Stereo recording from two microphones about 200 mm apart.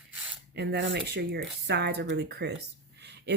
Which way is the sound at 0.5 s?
60° right (ahead or behind).